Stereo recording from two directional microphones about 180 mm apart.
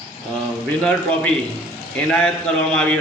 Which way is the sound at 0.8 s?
5° left (ahead or behind).